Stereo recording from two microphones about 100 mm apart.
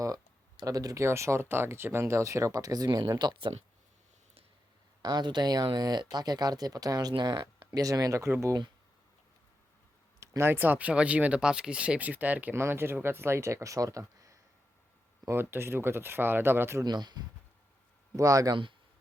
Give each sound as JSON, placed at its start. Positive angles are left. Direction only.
{"t": 0.0, "sound": "a sound", "side_deg": -35}
{"t": 1.0, "sound": "speech", "side_deg": -30}
{"t": 5.0, "sound": "speech", "side_deg": -45}
{"t": 7.2, "sound": "speech", "side_deg": -50}
{"t": 10.2, "sound": "speech", "side_deg": -25}
{"t": 16.8, "sound": "speech", "side_deg": -45}